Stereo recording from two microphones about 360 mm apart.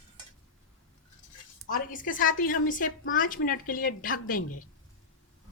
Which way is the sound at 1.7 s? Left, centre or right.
Left.